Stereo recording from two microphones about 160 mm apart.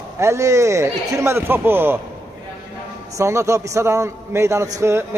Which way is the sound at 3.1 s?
20° right (ahead or behind).